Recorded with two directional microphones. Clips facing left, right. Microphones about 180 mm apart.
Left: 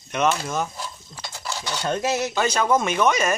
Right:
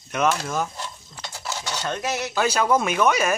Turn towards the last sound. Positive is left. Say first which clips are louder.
# even
turn(degrees=-5)  # may be behind; listen again after turning